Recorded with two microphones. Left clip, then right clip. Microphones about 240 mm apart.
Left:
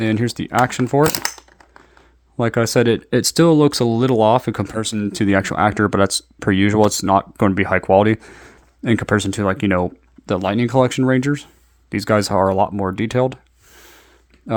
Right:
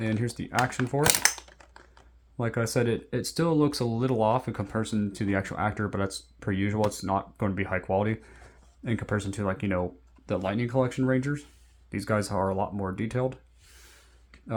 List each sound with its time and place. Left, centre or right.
0.0 s speech: left
1.0 s typing: centre
2.4 s speech: left
14.5 s speech: left